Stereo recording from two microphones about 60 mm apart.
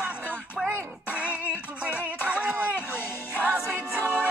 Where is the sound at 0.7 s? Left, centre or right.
Right.